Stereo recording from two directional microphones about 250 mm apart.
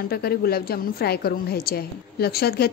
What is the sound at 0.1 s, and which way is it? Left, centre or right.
A woman's voice, left.